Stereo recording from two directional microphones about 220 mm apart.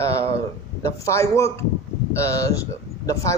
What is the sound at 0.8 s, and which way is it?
A man's voice, 15° left (ahead or behind).